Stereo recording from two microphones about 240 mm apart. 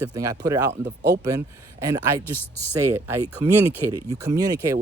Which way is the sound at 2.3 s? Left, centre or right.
Centre.